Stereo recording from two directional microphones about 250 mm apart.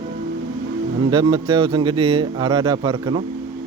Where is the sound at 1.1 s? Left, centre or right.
Centre.